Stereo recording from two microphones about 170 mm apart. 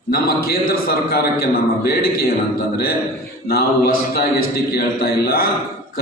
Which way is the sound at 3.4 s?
65° left (ahead or behind).